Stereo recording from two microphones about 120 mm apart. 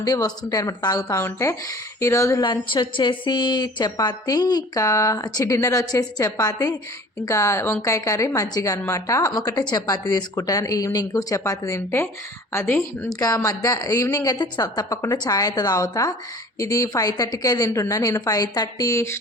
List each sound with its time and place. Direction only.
0.0 s speech: 30° left (ahead or behind)
2.4 s a woman's voice: 40° left (ahead or behind); by 19.1 s 25° left (ahead or behind)